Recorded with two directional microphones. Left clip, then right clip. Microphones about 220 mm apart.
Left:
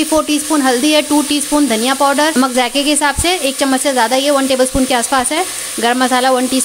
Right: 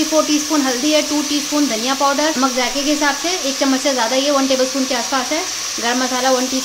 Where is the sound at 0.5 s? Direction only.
35° left (ahead or behind).